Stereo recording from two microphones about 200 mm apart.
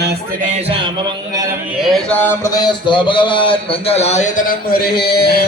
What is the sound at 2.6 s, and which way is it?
A man's voice, 25° left (ahead or behind).